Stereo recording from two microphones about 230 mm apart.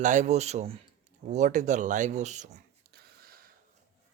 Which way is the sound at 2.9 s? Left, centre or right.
Right.